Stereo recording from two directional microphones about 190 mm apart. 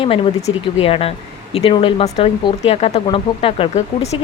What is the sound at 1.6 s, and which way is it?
Speech, 30° left (ahead or behind).